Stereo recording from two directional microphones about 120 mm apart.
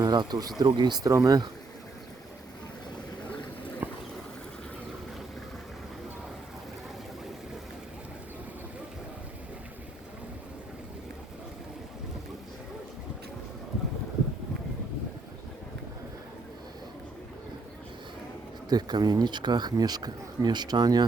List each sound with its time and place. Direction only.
0.0 s a man's voice: 35° right (ahead or behind)
3.8 s a sound: 15° right (ahead or behind)
18.7 s a man's voice: 35° right (ahead or behind)